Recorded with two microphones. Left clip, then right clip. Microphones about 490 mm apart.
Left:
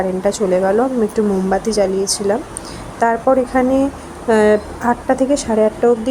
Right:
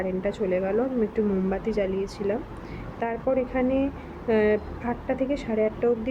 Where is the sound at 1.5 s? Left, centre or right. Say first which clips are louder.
Left 10 dB; right.